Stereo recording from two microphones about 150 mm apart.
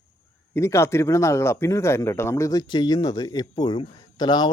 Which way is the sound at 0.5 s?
20° left (ahead or behind).